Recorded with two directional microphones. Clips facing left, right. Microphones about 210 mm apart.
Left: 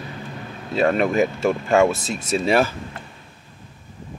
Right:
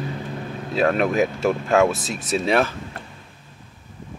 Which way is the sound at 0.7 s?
Centre (ahead or behind).